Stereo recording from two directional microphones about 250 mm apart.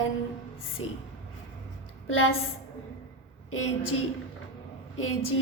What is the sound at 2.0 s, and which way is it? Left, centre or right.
Speech, left.